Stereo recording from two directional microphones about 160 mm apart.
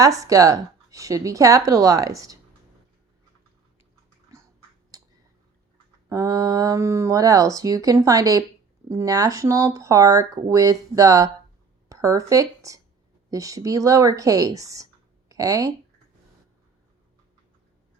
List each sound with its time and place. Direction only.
0.0 s speech: 20° right (ahead or behind)
4.9 s a sound: 20° right (ahead or behind)
6.1 s speech: 20° right (ahead or behind)